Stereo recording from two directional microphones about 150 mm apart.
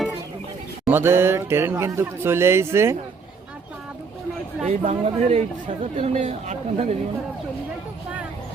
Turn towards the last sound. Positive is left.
turn(degrees=-45)  # may be behind; listen again after turning